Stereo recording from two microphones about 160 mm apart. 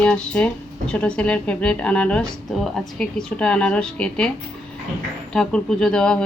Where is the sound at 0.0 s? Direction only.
5° left (ahead or behind).